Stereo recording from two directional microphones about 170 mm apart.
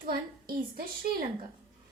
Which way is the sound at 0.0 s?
60° right (ahead or behind).